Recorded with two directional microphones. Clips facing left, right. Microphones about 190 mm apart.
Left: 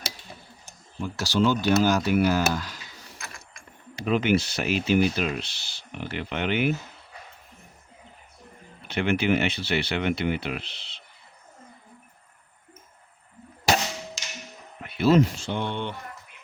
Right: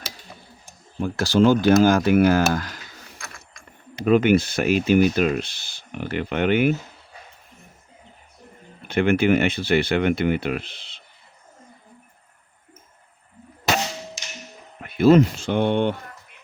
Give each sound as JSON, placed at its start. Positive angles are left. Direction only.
{"t": 1.0, "sound": "speech", "side_deg": -50}
{"t": 4.0, "sound": "speech", "side_deg": -50}
{"t": 8.9, "sound": "speech", "side_deg": -50}
{"t": 14.8, "sound": "speech", "side_deg": -50}